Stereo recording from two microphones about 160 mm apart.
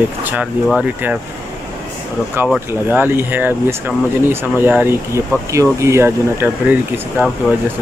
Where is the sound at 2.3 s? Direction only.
10° right (ahead or behind).